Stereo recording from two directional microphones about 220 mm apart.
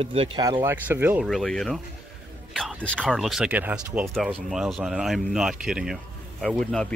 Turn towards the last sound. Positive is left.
turn(degrees=5)  # may be behind; listen again after turning